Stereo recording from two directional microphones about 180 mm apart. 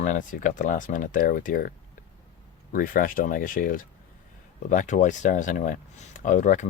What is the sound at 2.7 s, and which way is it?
Speech, 50° left (ahead or behind).